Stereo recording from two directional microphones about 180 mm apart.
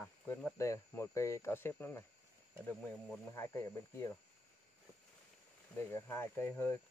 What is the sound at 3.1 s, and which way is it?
Speech, 15° left (ahead or behind).